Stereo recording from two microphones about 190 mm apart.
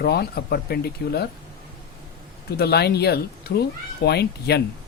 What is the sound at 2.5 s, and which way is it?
Speech, 55° left (ahead or behind).